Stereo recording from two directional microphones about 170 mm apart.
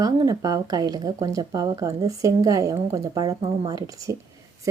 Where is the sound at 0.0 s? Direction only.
20° right (ahead or behind).